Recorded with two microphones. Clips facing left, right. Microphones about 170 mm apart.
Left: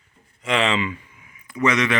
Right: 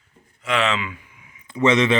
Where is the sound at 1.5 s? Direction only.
25° right (ahead or behind).